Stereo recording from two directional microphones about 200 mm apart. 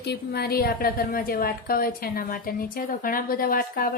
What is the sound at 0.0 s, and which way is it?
A woman's voice, 55° left (ahead or behind).